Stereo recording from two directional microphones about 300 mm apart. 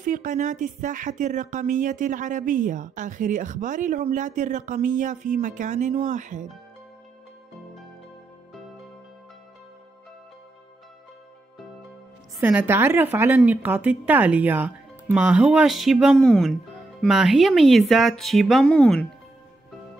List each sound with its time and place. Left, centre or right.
0.0 s speech: right
12.4 s a woman's voice: centre